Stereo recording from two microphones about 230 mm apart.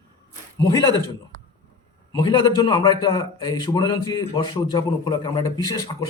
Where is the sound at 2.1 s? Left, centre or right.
Centre.